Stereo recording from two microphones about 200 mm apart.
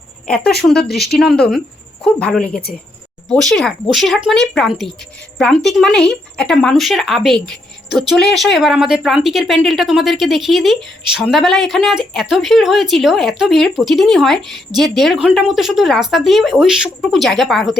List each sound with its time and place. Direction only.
0.3 s speech: 5° left (ahead or behind)
0.8 s speech: 50° left (ahead or behind)
1.2 s speech: centre (ahead or behind)